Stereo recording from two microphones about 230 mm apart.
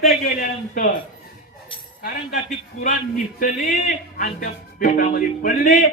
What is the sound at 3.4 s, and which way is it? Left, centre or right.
A man's voice, left.